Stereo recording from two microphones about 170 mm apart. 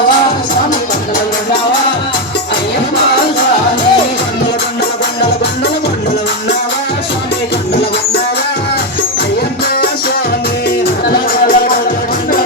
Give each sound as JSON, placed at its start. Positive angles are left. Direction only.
{"t": 11.1, "sound": "music", "side_deg": 60}